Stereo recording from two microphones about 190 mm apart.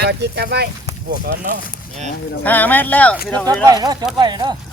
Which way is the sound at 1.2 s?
45° right (ahead or behind).